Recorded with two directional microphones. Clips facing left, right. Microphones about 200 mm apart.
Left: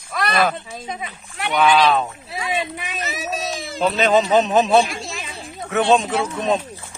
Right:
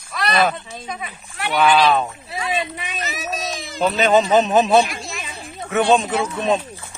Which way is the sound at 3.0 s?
25° left (ahead or behind).